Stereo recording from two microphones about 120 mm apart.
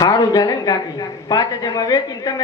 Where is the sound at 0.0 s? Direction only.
35° left (ahead or behind).